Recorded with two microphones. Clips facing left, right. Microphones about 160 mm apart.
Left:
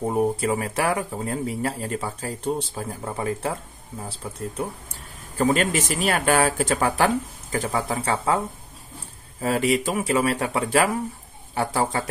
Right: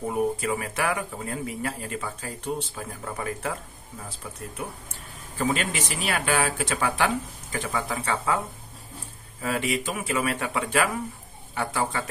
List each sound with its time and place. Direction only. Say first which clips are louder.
0.0 s speech: left 3 dB; 35° left (ahead or behind)
5.4 s speech: left 6 dB; 40° left (ahead or behind)
9.4 s speech: left 6 dB; 35° left (ahead or behind)